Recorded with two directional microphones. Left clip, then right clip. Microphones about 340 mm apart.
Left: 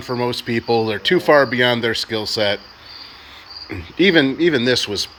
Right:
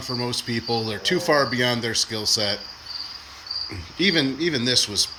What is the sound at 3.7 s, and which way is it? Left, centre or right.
Cricket, centre.